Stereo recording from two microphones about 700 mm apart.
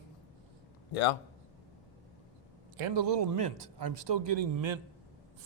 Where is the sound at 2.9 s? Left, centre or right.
Right.